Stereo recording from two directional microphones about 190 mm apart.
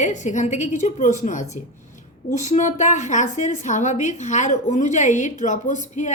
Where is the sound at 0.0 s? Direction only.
40° left (ahead or behind).